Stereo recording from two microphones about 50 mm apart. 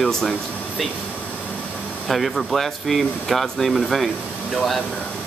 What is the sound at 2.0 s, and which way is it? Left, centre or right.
Speech, centre.